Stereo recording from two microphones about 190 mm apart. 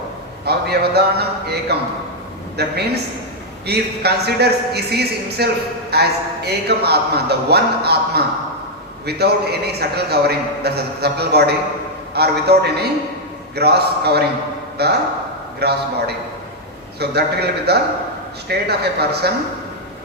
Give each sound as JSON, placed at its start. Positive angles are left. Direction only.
{"t": 0.4, "sound": "a man's voice", "side_deg": -60}
{"t": 17.0, "sound": "a man's voice", "side_deg": -60}